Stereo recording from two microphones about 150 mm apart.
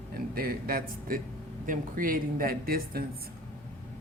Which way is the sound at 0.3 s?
80° right.